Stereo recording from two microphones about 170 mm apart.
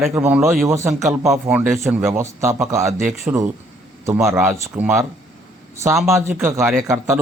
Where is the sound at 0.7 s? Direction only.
15° right (ahead or behind).